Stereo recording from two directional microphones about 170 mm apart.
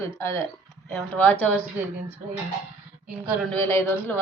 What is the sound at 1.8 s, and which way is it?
Speech, 10° right (ahead or behind).